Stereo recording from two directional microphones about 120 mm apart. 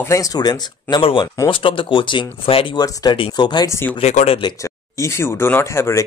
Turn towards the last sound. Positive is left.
turn(degrees=20)  # may be behind; listen again after turning